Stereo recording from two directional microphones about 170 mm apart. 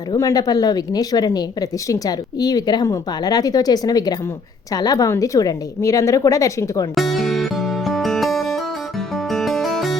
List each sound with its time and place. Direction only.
0.1 s speech: 20° left (ahead or behind)
6.9 s music: centre (ahead or behind)